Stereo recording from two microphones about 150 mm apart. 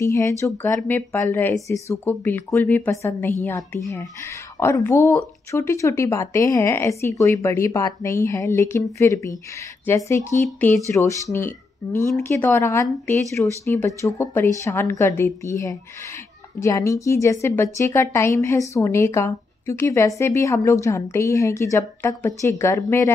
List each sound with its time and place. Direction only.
0.0 s a woman's voice: 20° left (ahead or behind)